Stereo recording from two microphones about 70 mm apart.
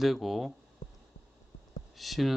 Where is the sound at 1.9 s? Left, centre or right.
Centre.